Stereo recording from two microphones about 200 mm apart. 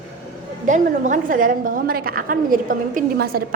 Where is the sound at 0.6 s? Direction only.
40° right (ahead or behind).